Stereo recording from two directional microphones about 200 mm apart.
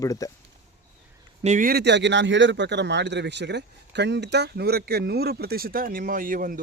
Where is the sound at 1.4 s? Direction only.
40° right (ahead or behind).